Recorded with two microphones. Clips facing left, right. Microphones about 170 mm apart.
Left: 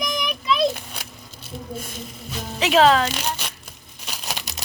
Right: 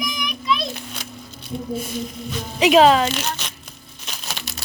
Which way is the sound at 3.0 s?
10° left (ahead or behind).